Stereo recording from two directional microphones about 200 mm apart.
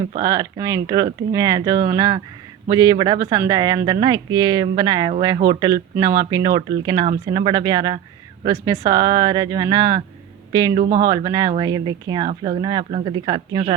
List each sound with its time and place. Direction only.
0.2 s speech: 20° right (ahead or behind)